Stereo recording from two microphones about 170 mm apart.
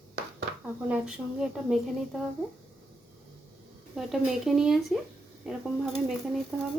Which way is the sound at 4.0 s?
Centre (ahead or behind).